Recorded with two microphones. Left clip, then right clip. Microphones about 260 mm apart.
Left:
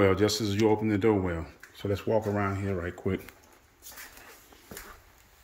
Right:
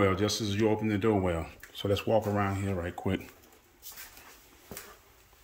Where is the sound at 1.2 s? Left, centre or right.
Centre.